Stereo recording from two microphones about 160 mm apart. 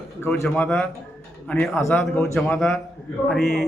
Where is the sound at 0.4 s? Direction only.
5° left (ahead or behind).